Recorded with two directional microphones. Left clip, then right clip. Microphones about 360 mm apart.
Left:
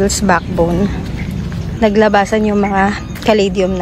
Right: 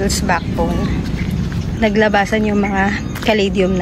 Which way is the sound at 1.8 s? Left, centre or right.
Centre.